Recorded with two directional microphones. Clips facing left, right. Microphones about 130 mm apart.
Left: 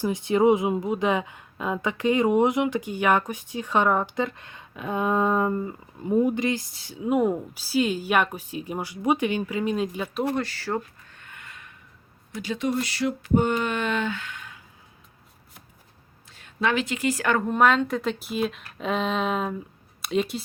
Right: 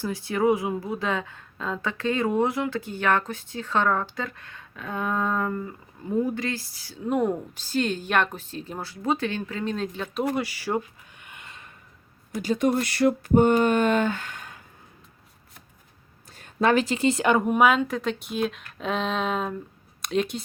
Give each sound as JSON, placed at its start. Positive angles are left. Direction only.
{"t": 0.0, "sound": "a woman's voice", "side_deg": 20}
{"t": 10.2, "sound": "a sound", "side_deg": -10}
{"t": 12.4, "sound": "speech", "side_deg": -45}
{"t": 16.3, "sound": "speech", "side_deg": -40}